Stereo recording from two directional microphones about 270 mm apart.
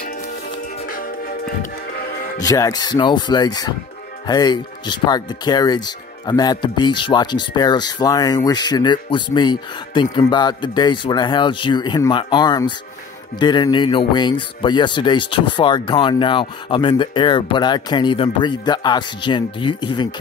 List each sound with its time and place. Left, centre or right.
0.9 s music: left
2.4 s speech: centre